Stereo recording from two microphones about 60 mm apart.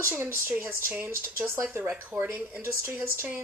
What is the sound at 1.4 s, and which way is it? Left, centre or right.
Speech, right.